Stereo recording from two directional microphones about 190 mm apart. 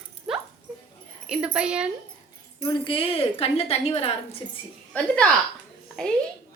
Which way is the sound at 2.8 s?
30° left (ahead or behind).